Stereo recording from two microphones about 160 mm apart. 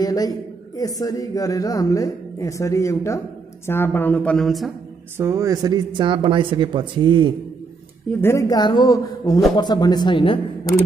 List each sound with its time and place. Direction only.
0.0 s a woman's voice: 25° left (ahead or behind); by 4.7 s centre (ahead or behind)
5.1 s speech: 15° right (ahead or behind)
8.2 s a woman's voice: 20° left (ahead or behind)